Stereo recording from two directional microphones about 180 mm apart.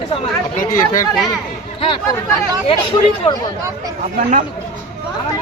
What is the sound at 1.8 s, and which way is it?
Speech, 30° left (ahead or behind).